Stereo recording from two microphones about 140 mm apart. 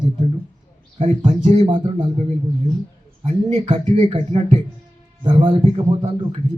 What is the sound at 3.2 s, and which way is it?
A man's voice, 45° right (ahead or behind).